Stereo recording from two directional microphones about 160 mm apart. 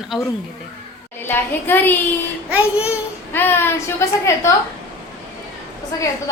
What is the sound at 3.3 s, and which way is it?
Speech, 15° left (ahead or behind).